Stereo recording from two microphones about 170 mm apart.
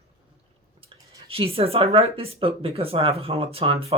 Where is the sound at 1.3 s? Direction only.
35° right (ahead or behind).